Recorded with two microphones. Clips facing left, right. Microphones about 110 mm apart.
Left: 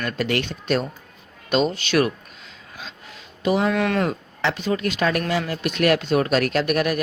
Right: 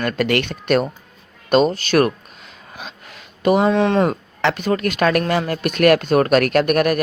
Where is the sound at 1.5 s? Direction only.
45° right (ahead or behind).